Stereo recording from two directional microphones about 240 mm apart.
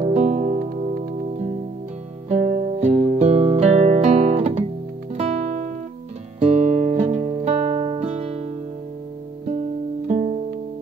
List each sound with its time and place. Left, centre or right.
0.0 s music: right
10.0 s music: right